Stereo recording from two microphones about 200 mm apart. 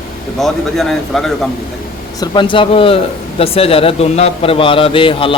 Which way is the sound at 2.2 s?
25° left (ahead or behind).